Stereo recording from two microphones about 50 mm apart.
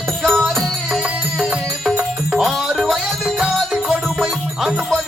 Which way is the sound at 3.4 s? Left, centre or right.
Centre.